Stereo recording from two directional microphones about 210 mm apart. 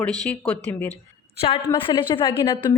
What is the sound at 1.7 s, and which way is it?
A woman's voice, 25° left (ahead or behind).